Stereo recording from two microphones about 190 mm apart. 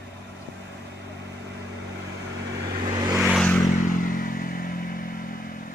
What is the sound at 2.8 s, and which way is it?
Vehicle, 20° right (ahead or behind).